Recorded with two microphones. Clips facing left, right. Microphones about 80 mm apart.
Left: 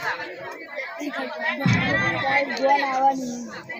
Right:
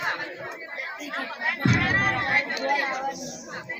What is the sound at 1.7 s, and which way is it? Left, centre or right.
Crowd, centre.